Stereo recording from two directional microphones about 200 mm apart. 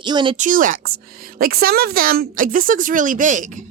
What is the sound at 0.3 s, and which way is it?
Speech, 40° right (ahead or behind).